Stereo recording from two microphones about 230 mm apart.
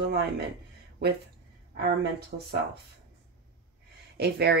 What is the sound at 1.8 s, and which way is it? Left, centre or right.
Speech, right.